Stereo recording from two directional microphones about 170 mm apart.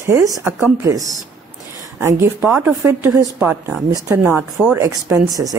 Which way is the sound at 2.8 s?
20° right (ahead or behind).